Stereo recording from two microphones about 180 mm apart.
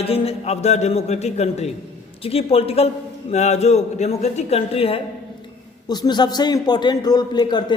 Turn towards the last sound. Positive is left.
turn(degrees=25)  # may be behind; listen again after turning